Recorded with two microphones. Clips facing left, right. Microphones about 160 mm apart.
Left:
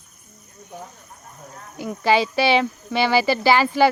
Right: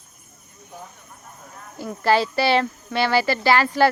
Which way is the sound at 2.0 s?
Centre (ahead or behind).